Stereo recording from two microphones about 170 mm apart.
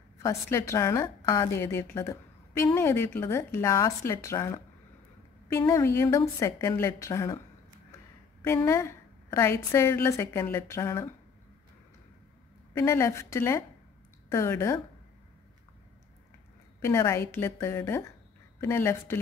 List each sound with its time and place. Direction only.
0.2 s a woman's voice: 15° left (ahead or behind)
12.7 s a woman's voice: 15° left (ahead or behind)
16.8 s a woman's voice: 15° left (ahead or behind)